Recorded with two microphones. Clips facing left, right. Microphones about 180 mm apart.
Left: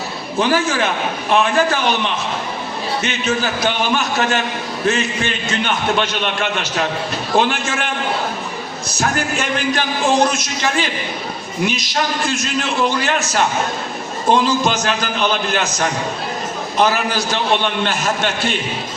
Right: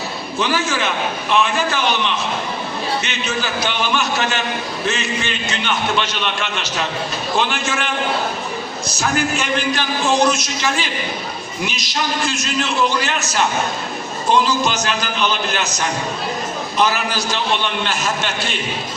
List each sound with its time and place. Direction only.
0.3 s a man's voice: 50° left (ahead or behind)
3.0 s a man's voice: 50° left (ahead or behind)
9.0 s a man's voice: 55° left (ahead or behind)
12.9 s a man's voice: 55° left (ahead or behind)
16.7 s a man's voice: 50° left (ahead or behind)